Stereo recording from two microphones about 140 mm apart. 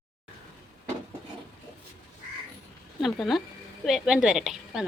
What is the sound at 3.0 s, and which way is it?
Speech, centre (ahead or behind).